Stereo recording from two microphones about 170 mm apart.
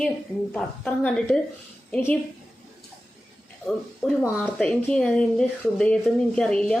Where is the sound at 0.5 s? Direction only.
5° left (ahead or behind).